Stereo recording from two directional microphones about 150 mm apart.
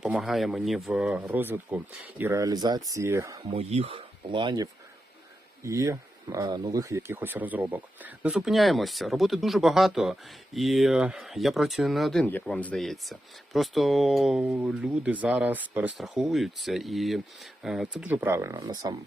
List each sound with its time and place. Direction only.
0.0 s speech: centre (ahead or behind); by 3.4 s 20° right (ahead or behind)
3.5 s speech: 45° right (ahead or behind); by 18.9 s 25° right (ahead or behind)